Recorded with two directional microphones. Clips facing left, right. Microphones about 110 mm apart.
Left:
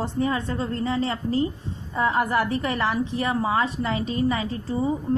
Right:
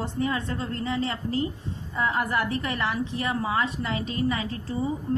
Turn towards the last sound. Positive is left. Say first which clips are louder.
# left 3 dB
turn(degrees=30)  # may be behind; listen again after turning